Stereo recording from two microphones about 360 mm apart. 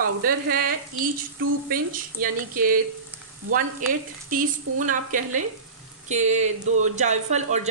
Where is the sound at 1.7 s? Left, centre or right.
Right.